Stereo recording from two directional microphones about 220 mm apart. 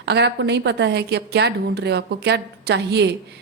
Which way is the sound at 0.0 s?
50° right (ahead or behind).